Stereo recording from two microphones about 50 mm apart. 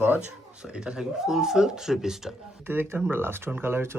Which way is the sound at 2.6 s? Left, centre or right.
Right.